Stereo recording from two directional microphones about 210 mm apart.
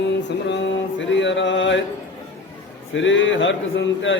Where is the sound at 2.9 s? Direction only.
65° left (ahead or behind).